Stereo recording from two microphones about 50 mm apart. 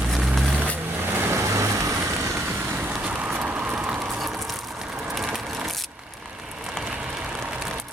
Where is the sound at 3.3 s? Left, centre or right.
Right.